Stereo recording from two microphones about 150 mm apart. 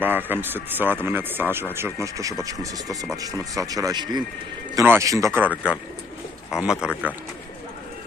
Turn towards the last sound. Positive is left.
turn(degrees=-5)  # may be behind; listen again after turning